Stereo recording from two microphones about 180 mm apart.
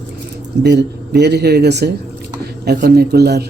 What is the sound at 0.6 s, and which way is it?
A man's voice, 70° right (ahead or behind).